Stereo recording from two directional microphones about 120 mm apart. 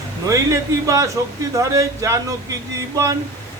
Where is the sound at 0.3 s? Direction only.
25° right (ahead or behind).